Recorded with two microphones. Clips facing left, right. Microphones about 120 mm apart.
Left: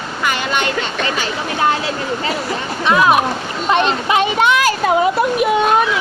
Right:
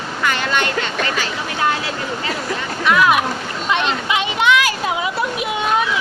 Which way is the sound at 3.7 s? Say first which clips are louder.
Left 5 dB; 40° left (ahead or behind).